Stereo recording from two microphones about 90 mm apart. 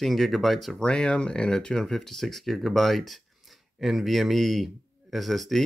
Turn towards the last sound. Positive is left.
turn(degrees=0)  # may be behind; listen again after turning